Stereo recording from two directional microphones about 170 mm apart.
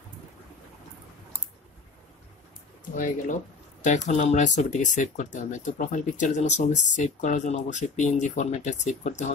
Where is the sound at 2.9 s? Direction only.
50° left (ahead or behind).